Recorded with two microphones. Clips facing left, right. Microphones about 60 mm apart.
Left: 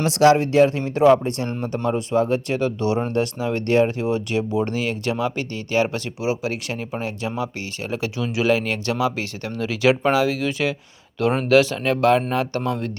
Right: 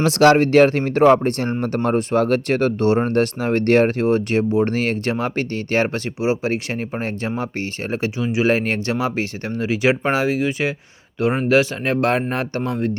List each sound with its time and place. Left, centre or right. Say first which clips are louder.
0.0 s speech: right 2 dB; right
0.8 s speech: right 2 dB; right